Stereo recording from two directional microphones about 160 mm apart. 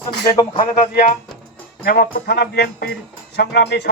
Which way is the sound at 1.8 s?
70° left (ahead or behind).